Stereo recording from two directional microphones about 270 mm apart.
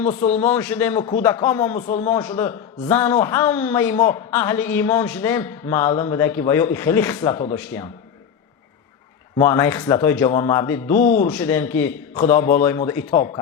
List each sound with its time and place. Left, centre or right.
0.1 s a man's voice: left
0.3 s a man's voice: centre
9.4 s a man's voice: centre